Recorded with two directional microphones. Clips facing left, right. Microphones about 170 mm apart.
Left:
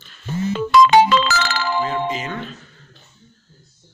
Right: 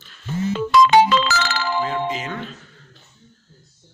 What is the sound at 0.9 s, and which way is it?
Music, 55° left (ahead or behind).